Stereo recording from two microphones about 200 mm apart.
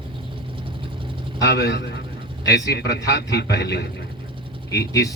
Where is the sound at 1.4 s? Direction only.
55° left (ahead or behind).